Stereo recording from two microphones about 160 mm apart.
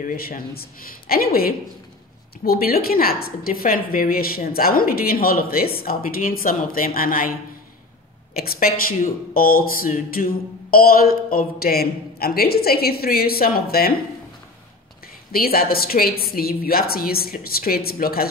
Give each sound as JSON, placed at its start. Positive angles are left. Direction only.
{"t": 0.0, "sound": "a woman's voice", "side_deg": 65}
{"t": 8.4, "sound": "speech", "side_deg": 70}
{"t": 15.3, "sound": "speech", "side_deg": 70}